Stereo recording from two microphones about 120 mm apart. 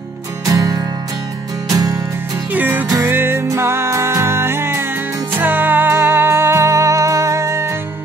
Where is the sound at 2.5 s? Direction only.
15° right (ahead or behind).